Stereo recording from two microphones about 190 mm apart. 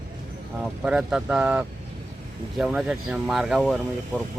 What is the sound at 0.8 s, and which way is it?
Speech, 5° right (ahead or behind).